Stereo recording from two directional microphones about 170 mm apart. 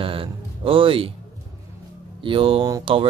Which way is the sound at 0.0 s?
30° right (ahead or behind).